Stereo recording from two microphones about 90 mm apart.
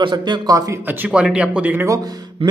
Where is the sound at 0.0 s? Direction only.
60° right (ahead or behind).